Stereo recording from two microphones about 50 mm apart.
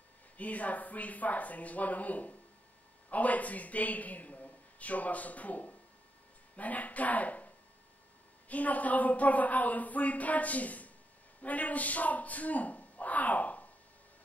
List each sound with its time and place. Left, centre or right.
0.4 s speech: left